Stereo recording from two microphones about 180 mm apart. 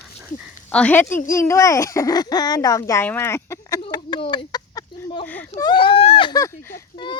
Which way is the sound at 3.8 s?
25° left (ahead or behind).